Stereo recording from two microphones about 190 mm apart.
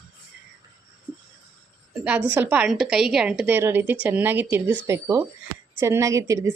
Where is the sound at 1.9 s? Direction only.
5° right (ahead or behind).